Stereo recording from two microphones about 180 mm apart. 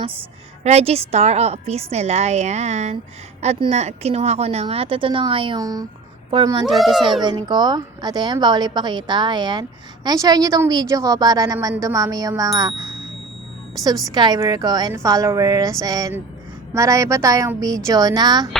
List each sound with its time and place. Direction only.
0.6 s a woman's voice: 35° right (ahead or behind)
6.7 s a child's voice: centre (ahead or behind)
7.2 s a woman's voice: 25° right (ahead or behind)
13.8 s a woman's voice: 20° right (ahead or behind)